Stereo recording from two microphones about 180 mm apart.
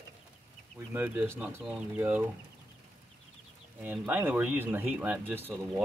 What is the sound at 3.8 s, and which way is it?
Speech, 10° right (ahead or behind).